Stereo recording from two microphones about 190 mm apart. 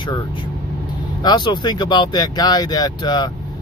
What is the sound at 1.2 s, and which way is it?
Speech, 20° left (ahead or behind).